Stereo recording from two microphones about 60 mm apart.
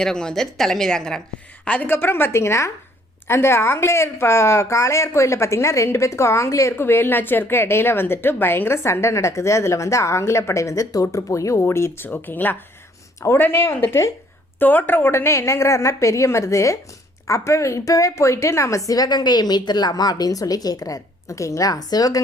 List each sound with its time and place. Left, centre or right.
0.0 s a woman's voice: centre
1.6 s a woman's voice: left
1.9 s a woman's voice: left
6.7 s a woman's voice: left
12.0 s a woman's voice: left
13.1 s speech: left
13.5 s a woman's voice: left
13.8 s a woman's voice: left
14.6 s a woman's voice: left
15.1 s a woman's voice: left